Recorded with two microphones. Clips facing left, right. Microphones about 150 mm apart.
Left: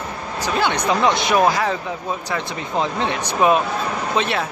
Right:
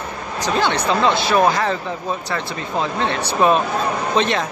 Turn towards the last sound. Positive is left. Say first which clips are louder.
# right 2 dB
turn(degrees=5)  # may be behind; listen again after turning